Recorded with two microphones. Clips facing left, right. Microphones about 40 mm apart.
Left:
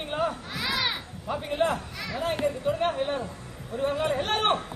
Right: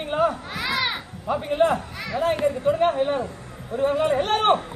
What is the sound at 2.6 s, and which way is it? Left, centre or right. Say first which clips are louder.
A man's voice: right 6 dB; centre.